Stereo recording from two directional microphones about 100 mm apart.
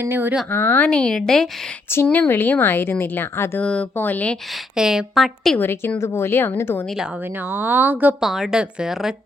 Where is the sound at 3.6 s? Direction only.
10° left (ahead or behind).